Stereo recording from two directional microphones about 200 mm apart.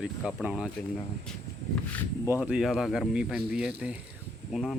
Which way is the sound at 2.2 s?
10° right (ahead or behind).